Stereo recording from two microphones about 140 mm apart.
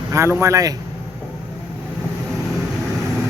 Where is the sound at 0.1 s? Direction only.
20° right (ahead or behind).